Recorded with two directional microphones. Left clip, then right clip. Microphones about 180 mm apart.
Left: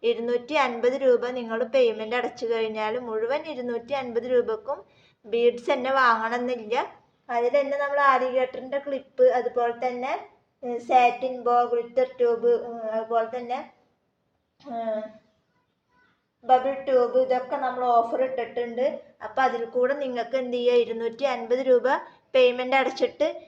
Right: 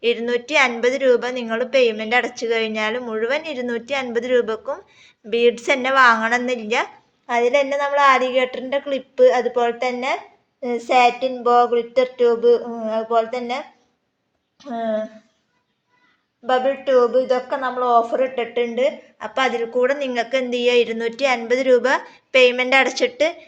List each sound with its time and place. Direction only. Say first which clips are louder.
0.0 s a woman's voice: right 5 dB; 10° right (ahead or behind)
7.3 s a woman's voice: right 6 dB; 30° right (ahead or behind)
16.5 s a woman's voice: right 3 dB; 35° right (ahead or behind); by 23.4 s 10° right (ahead or behind)